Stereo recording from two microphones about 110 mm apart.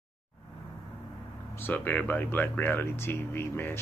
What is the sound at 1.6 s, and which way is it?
Speech, 15° left (ahead or behind).